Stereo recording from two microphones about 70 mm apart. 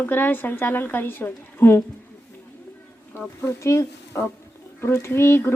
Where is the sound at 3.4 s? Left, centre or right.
Left.